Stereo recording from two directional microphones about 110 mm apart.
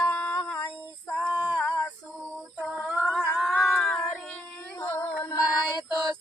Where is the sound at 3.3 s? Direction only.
Centre (ahead or behind).